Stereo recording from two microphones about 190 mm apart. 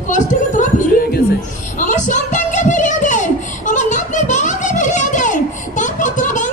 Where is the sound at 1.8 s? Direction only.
40° left (ahead or behind).